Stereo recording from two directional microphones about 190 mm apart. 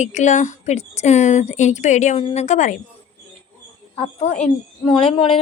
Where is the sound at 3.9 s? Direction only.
35° left (ahead or behind).